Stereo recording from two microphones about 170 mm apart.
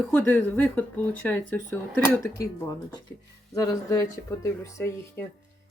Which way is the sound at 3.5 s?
20° left (ahead or behind).